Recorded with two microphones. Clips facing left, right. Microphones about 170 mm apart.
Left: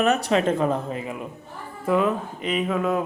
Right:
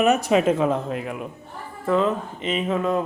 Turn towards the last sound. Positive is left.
turn(degrees=5)  # may be behind; listen again after turning